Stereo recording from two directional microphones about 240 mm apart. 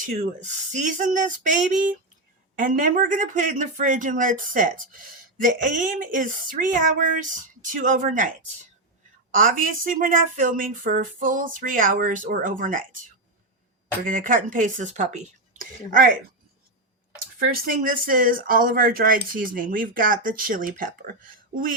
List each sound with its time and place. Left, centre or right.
0.0 s speech: right
9.3 s speech: right
14.0 s speech: right
17.3 s speech: right